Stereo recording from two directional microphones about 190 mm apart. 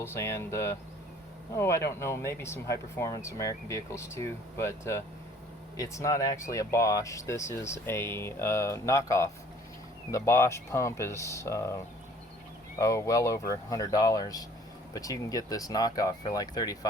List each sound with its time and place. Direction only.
0.0 s speech: 15° left (ahead or behind)
12.8 s speech: 15° left (ahead or behind)